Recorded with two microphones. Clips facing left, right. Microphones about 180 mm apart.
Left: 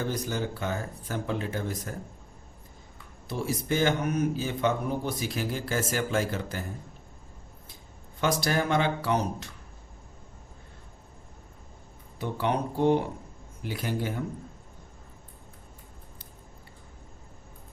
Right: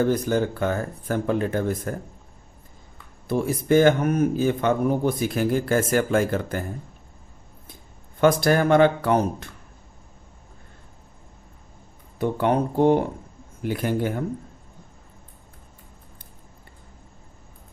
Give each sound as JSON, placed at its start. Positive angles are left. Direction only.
{"t": 0.0, "sound": "speech", "side_deg": -55}
{"t": 3.2, "sound": "speech", "side_deg": -55}
{"t": 8.2, "sound": "speech", "side_deg": -55}
{"t": 12.2, "sound": "speech", "side_deg": -50}